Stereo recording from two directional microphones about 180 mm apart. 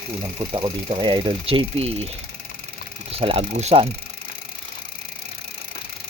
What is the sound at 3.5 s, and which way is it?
Speech, 35° right (ahead or behind).